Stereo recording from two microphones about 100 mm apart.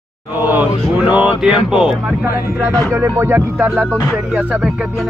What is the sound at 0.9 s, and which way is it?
Speech, 15° right (ahead or behind).